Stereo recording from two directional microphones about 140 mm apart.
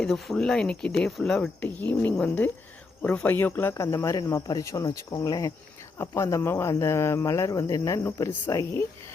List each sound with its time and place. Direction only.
0.0 s speech: 5° left (ahead or behind); by 8.9 s 20° left (ahead or behind)